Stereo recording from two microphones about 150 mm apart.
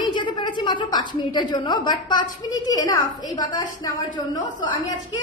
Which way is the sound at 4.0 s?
30° left (ahead or behind).